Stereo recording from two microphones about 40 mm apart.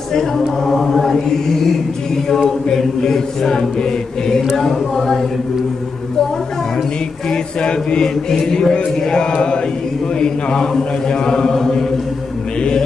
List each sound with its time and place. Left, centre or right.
0.1 s chant: centre
0.9 s mantra: centre
2.2 s chant: centre
7.2 s chant: left